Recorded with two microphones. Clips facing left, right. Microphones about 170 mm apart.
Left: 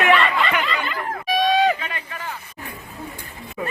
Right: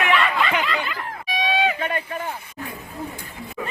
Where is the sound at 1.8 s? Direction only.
50° right (ahead or behind).